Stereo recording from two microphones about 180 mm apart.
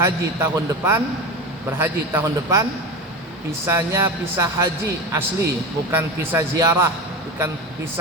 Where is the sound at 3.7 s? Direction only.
15° right (ahead or behind).